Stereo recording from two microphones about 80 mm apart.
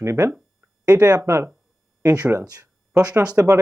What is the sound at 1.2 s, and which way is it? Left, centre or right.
Speech, right.